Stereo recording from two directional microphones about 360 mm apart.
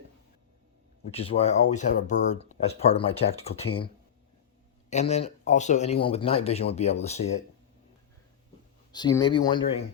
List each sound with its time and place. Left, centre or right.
1.1 s speech: centre
4.9 s speech: centre
8.9 s speech: centre